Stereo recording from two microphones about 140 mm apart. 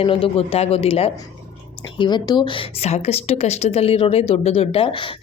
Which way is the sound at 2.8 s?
50° left (ahead or behind).